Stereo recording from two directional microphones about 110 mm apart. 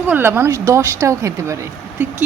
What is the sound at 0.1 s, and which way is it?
Speech, 20° right (ahead or behind).